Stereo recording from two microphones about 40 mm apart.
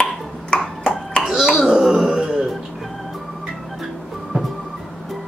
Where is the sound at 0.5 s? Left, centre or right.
Left.